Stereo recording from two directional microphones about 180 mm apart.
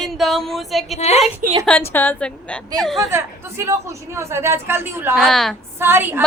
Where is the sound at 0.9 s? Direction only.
35° left (ahead or behind).